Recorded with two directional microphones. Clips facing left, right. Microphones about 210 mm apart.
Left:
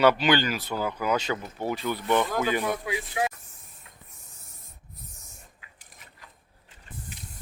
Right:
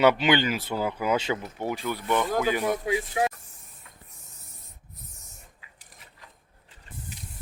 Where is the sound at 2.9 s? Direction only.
45° right (ahead or behind).